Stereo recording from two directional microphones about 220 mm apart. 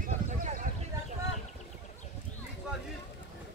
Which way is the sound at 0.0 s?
35° right (ahead or behind).